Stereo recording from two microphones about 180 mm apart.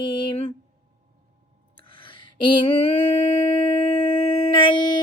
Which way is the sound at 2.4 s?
25° left (ahead or behind).